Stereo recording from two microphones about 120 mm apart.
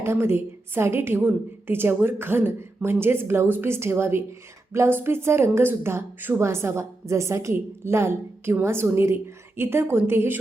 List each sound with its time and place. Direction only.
0.0 s a woman's voice: 20° right (ahead or behind)